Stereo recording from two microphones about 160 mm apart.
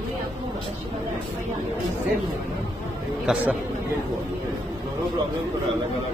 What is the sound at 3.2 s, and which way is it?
Speech, 10° right (ahead or behind).